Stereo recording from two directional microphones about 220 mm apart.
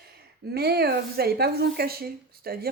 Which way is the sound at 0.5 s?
45° right (ahead or behind).